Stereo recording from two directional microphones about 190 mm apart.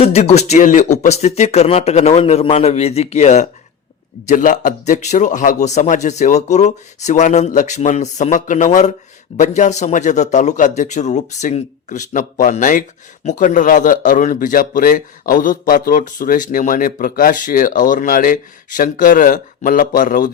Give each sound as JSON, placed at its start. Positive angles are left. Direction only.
{"t": 0.0, "sound": "a man's voice", "side_deg": 35}